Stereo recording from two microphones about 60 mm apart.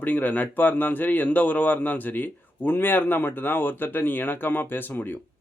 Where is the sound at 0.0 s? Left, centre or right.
Left.